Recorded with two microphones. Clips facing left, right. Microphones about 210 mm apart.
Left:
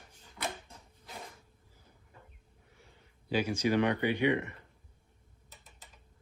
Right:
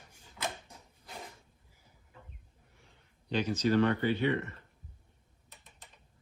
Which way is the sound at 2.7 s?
Centre (ahead or behind).